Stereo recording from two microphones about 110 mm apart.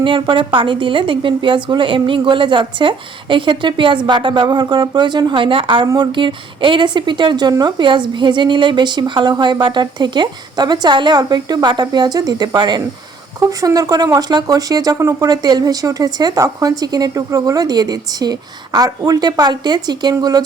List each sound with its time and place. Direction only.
0.0 s a woman's voice: 50° right (ahead or behind)